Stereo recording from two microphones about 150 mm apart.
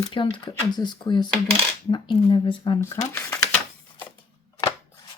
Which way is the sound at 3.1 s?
15° left (ahead or behind).